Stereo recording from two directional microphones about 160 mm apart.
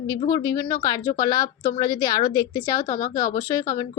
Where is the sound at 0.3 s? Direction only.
20° left (ahead or behind).